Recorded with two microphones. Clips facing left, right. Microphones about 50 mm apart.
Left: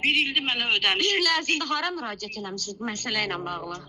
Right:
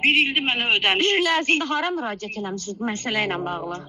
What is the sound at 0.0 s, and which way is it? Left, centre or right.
Speech, right.